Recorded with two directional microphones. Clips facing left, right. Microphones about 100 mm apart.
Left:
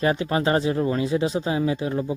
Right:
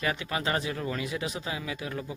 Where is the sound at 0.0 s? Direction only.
35° left (ahead or behind).